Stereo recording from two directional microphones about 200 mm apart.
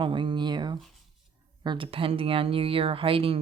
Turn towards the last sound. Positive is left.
turn(degrees=-25)  # may be behind; listen again after turning